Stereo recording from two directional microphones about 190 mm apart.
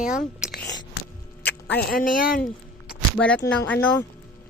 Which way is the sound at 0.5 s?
65° left (ahead or behind).